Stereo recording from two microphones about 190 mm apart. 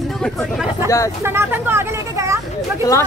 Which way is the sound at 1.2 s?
10° right (ahead or behind).